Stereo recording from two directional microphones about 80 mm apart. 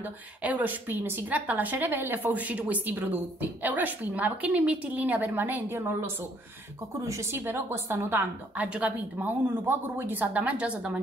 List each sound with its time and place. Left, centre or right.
0.0 s a woman's voice: right
8.6 s a woman's voice: centre